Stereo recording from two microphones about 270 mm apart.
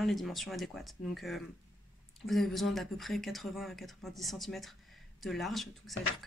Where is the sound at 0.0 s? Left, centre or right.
Centre.